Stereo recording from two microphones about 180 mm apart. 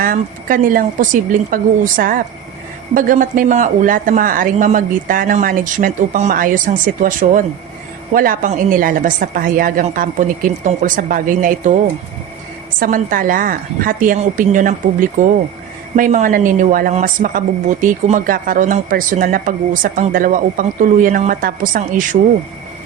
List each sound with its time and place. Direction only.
0.0 s a woman's voice: 50° right (ahead or behind)
12.8 s a woman's voice: 50° right (ahead or behind)